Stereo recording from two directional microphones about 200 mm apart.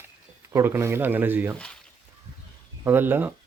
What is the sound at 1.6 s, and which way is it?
Speech, 5° left (ahead or behind).